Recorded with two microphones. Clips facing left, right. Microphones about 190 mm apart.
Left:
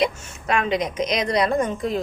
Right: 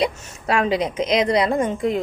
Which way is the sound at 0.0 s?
30° right (ahead or behind).